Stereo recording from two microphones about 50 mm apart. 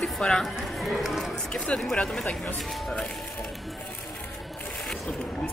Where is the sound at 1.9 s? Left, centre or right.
Centre.